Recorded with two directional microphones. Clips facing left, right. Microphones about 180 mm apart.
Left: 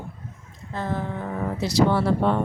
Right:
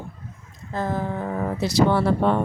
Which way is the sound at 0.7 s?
45° right (ahead or behind).